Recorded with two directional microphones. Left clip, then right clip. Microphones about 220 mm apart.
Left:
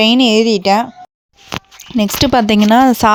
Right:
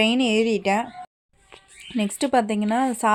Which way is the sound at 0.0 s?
40° left (ahead or behind).